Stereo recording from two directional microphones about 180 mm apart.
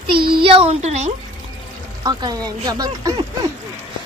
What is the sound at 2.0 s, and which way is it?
Speech, 20° right (ahead or behind).